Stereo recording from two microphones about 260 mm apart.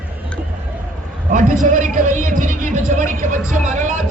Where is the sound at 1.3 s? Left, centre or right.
Right.